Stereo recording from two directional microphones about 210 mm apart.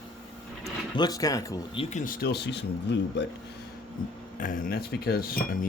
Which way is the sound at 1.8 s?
35° left (ahead or behind).